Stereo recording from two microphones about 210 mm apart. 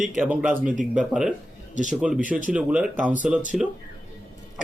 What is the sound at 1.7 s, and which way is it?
Speech, 35° right (ahead or behind).